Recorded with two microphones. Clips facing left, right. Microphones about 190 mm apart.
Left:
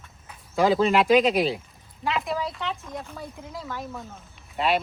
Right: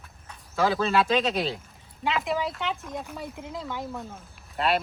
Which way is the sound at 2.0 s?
Centre (ahead or behind).